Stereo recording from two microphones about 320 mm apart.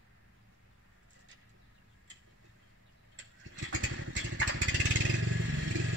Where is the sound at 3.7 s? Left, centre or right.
Right.